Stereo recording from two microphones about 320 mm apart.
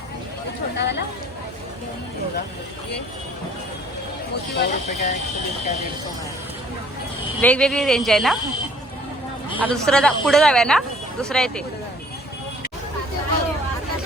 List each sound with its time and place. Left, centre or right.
0.8 s speech: left
4.5 s speech: left
7.4 s speech: centre
9.6 s speech: centre